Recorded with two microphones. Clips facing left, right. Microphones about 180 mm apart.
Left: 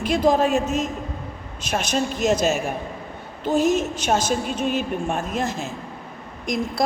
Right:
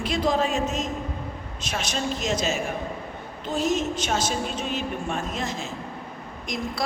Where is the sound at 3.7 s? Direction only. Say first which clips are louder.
Left 4 dB; 50° left (ahead or behind).